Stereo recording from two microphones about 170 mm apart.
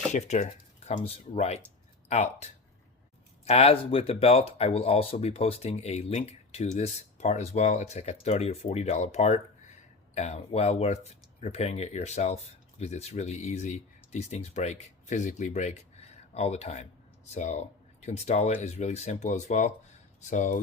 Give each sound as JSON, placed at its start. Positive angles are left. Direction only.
{"t": 0.1, "sound": "speech", "side_deg": 45}